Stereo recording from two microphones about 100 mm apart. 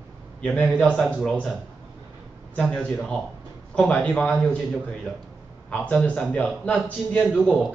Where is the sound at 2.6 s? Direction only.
10° left (ahead or behind).